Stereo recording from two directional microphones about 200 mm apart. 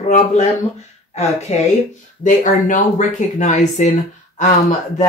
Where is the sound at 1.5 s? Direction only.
35° left (ahead or behind).